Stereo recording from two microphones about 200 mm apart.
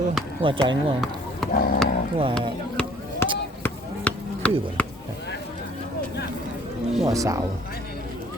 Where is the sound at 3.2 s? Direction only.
10° left (ahead or behind).